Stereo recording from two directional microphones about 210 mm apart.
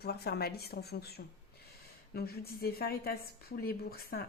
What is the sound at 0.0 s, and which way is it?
A woman's voice, 50° left (ahead or behind).